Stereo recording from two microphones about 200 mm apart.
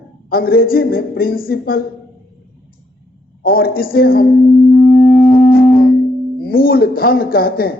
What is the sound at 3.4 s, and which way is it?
Speech, 45° left (ahead or behind).